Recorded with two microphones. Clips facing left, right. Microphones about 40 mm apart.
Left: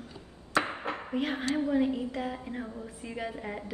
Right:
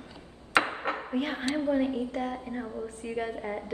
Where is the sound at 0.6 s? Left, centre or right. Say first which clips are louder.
Right 3 dB; right.